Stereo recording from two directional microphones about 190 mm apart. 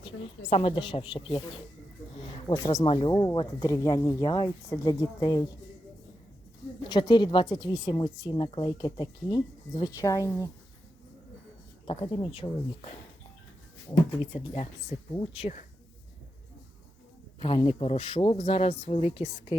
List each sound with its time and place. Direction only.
0.0 s a woman's voice: 30° left (ahead or behind)
6.8 s a woman's voice: 25° left (ahead or behind)
11.9 s a woman's voice: 25° left (ahead or behind)
17.4 s speech: 30° left (ahead or behind)